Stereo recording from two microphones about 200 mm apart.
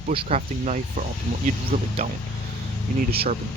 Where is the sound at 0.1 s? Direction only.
30° right (ahead or behind).